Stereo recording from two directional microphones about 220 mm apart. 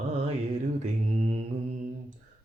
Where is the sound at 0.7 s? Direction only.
30° right (ahead or behind).